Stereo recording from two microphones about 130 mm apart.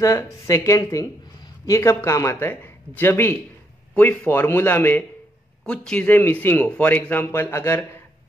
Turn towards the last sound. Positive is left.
turn(degrees=20)  # may be behind; listen again after turning